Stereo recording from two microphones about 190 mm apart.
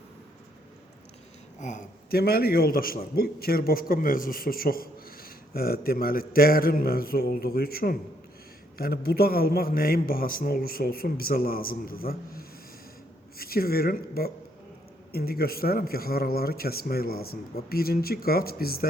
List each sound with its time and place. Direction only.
1.6 s a man's voice: 45° left (ahead or behind)